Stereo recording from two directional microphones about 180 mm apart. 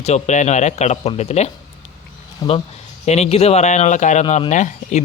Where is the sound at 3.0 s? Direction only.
35° left (ahead or behind).